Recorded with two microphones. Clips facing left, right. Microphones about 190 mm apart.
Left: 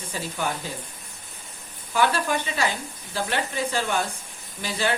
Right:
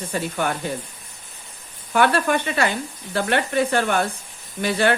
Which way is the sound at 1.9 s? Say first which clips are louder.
Right 4 dB; 60° right (ahead or behind).